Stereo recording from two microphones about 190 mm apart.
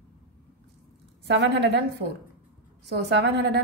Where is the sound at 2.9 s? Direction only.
60° right (ahead or behind).